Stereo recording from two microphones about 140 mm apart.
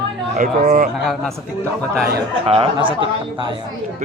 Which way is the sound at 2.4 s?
40° right (ahead or behind).